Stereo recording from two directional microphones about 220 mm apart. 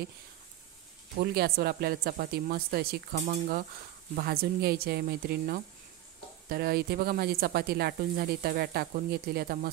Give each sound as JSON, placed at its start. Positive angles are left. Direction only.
{"t": 1.1, "sound": "speech", "side_deg": -45}